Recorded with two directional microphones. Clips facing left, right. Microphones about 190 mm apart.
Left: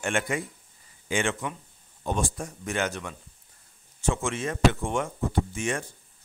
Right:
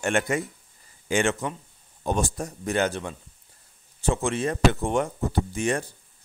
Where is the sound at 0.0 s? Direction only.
40° right (ahead or behind).